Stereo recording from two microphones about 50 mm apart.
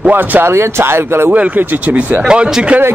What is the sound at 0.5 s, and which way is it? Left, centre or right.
Speech, right.